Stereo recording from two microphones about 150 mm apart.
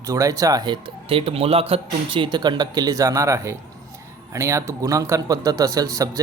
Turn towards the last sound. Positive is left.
turn(degrees=-25)  # may be behind; listen again after turning